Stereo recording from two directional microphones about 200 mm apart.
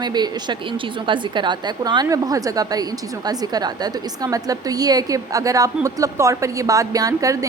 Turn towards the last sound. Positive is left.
turn(degrees=-15)  # may be behind; listen again after turning